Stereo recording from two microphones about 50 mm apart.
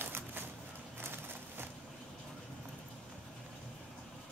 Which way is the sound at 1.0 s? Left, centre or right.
Right.